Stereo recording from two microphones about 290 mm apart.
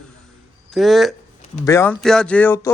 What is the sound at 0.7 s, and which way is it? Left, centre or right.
A man's voice, centre.